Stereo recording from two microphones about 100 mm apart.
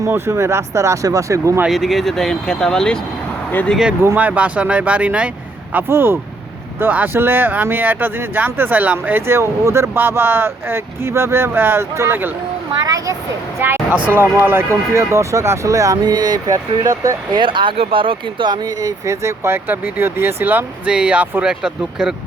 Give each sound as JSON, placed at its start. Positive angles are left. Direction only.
{"t": 0.1, "sound": "speech", "side_deg": -30}
{"t": 1.6, "sound": "speech", "side_deg": 0}
{"t": 4.0, "sound": "speech", "side_deg": -20}
{"t": 12.8, "sound": "speech", "side_deg": -40}
{"t": 13.6, "sound": "speech", "side_deg": -25}
{"t": 17.4, "sound": "speech", "side_deg": -55}